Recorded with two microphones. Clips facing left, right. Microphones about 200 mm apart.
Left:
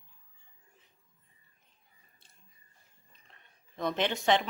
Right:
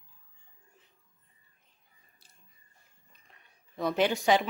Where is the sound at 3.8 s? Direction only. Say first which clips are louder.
Right 4 dB; 10° right (ahead or behind).